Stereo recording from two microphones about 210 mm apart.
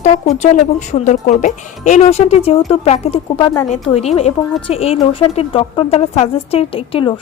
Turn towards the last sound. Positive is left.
turn(degrees=25)  # may be behind; listen again after turning